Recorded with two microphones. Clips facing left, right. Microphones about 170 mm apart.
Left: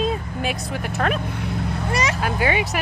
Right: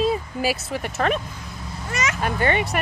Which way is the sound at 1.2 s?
65° left (ahead or behind).